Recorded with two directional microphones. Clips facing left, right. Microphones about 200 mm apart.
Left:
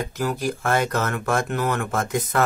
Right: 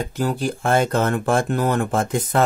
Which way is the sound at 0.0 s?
30° right (ahead or behind).